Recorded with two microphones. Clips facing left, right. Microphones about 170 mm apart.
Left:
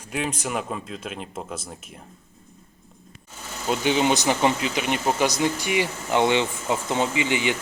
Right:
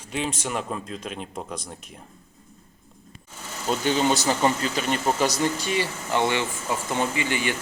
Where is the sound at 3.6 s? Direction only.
10° left (ahead or behind).